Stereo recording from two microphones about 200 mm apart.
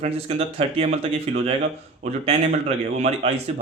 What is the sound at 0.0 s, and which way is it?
Speech, 30° right (ahead or behind).